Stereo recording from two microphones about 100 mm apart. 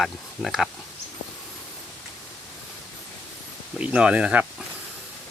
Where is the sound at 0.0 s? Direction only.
Centre (ahead or behind).